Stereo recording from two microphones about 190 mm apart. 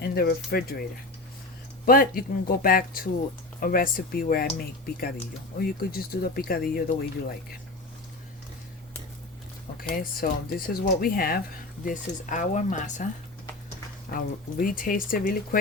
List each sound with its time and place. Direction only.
0.0 s speech: 55° left (ahead or behind)
9.7 s speech: 50° left (ahead or behind)
14.1 s speech: 45° left (ahead or behind)